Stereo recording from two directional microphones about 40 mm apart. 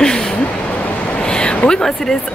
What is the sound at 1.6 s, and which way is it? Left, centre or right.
Speech, centre.